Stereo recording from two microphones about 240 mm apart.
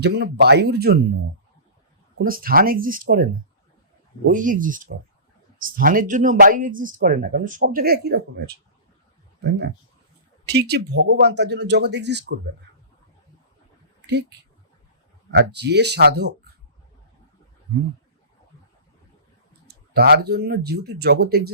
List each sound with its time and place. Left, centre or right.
0.0 s speech: right
2.1 s speech: right
4.3 s speech: right
10.4 s speech: right
14.1 s speech: right
19.6 s speech: right